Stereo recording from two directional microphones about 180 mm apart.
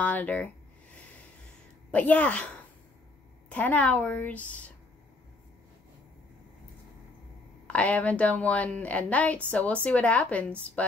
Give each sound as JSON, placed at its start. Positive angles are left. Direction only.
{"t": 0.0, "sound": "a woman's voice", "side_deg": 10}
{"t": 1.9, "sound": "a woman's voice", "side_deg": 10}
{"t": 7.6, "sound": "a woman's voice", "side_deg": 5}